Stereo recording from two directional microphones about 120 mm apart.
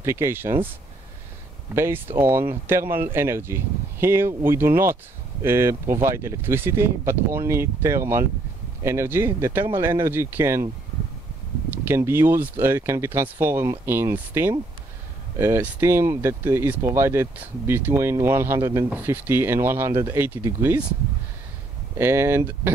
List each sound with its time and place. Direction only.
0.0 s speech: 20° right (ahead or behind)
11.8 s speech: 20° right (ahead or behind)
21.9 s speech: 20° right (ahead or behind)